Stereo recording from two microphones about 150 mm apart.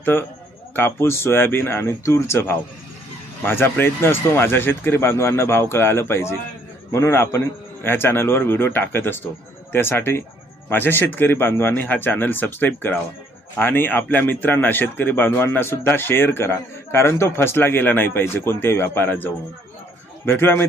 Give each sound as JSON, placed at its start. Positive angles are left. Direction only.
{"t": 0.0, "sound": "a man's voice", "side_deg": 15}